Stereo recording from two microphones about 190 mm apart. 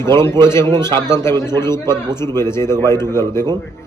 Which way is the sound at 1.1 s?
15° left (ahead or behind).